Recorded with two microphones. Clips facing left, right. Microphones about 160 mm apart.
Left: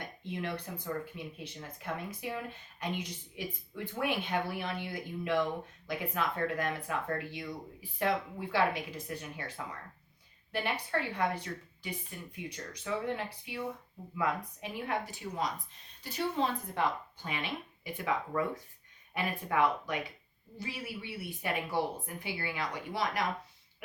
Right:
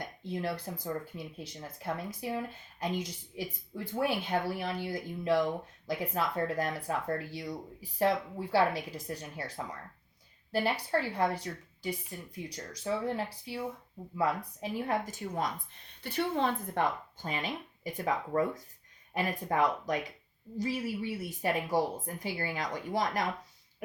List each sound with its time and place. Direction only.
0.3 s speech: 35° right (ahead or behind)
10.5 s a woman's voice: 35° right (ahead or behind)
16.0 s a woman's voice: 60° right (ahead or behind)